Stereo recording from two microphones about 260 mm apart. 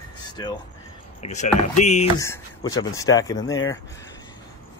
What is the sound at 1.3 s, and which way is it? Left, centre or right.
Speech, left.